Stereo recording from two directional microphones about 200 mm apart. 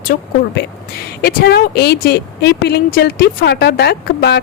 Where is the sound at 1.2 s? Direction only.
55° left (ahead or behind).